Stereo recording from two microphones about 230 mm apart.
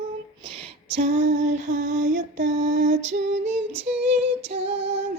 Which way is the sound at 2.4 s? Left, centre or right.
Right.